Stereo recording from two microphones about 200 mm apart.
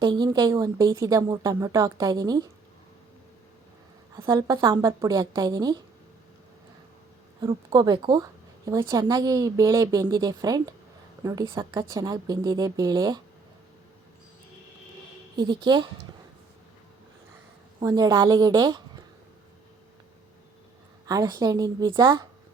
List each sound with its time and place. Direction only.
0.0 s a woman's voice: 25° right (ahead or behind)
4.3 s a woman's voice: 15° right (ahead or behind)
7.7 s a woman's voice: 20° right (ahead or behind)
15.4 s a woman's voice: 20° right (ahead or behind)
17.7 s a woman's voice: 20° right (ahead or behind)
21.1 s a woman's voice: 15° right (ahead or behind)